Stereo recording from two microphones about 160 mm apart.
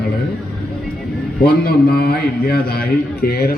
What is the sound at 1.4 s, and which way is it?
A man's voice, 70° left (ahead or behind).